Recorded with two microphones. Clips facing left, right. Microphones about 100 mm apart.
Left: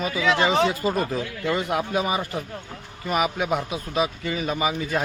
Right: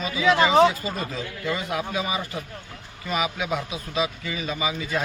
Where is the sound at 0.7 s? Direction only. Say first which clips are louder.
Left 5 dB; 55° left (ahead or behind).